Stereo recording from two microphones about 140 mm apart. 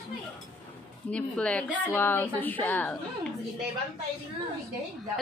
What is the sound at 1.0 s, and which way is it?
A woman's voice, 5° left (ahead or behind).